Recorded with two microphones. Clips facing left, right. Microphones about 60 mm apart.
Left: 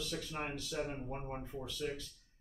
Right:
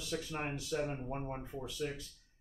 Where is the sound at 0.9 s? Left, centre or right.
Centre.